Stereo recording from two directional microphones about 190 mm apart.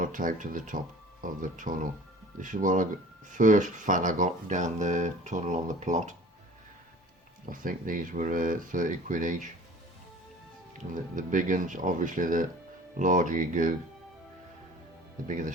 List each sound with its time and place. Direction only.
0.0 s speech: 45° right (ahead or behind)
7.4 s speech: 45° right (ahead or behind)
10.9 s speech: 45° right (ahead or behind)
15.3 s speech: 40° right (ahead or behind)